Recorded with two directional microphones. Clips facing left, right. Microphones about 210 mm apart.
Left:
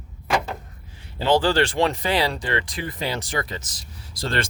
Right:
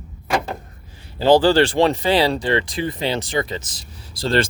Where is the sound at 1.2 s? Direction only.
35° right (ahead or behind).